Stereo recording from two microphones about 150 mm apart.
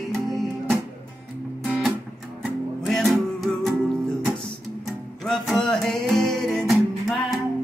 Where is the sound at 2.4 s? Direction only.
Centre (ahead or behind).